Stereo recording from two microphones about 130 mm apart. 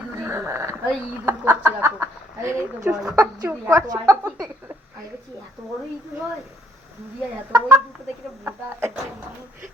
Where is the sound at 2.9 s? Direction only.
10° right (ahead or behind).